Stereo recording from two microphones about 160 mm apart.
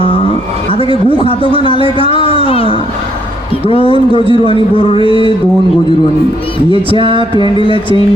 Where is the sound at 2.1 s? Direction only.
35° left (ahead or behind).